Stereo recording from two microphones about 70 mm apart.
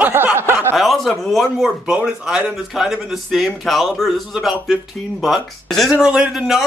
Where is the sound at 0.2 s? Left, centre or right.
Right.